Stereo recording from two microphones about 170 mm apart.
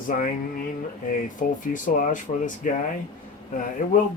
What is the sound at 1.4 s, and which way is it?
Speech, 55° left (ahead or behind).